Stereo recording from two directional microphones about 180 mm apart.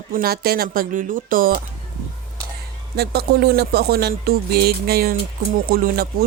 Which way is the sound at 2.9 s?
60° right (ahead or behind).